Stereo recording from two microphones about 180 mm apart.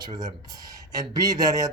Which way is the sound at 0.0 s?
20° right (ahead or behind).